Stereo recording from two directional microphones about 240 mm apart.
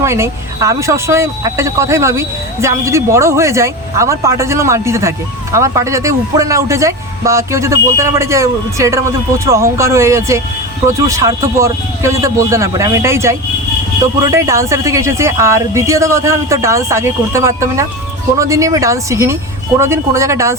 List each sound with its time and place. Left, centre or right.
0.0 s speech: centre